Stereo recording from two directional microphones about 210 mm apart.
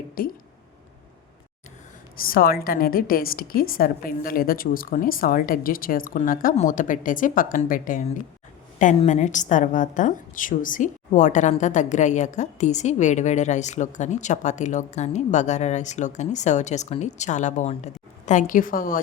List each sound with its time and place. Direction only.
0.2 s a woman's voice: 45° left (ahead or behind)
2.3 s a woman's voice: 45° left (ahead or behind)